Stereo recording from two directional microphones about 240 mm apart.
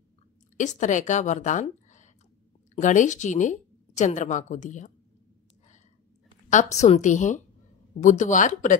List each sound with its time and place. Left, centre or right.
0.6 s a woman's voice: left
6.5 s speech: left